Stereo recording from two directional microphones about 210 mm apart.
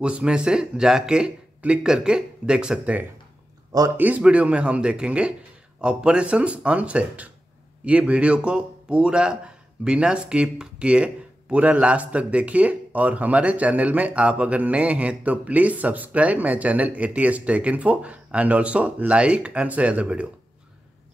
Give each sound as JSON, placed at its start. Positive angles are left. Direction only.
{"t": 0.0, "sound": "speech", "side_deg": -5}